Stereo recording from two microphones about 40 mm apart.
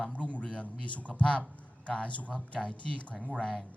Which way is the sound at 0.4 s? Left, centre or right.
Left.